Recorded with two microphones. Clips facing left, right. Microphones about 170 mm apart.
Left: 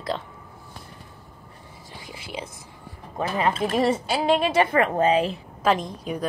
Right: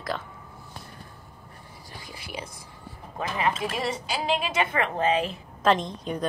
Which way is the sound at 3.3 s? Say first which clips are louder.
Left 5 dB; 40° left (ahead or behind).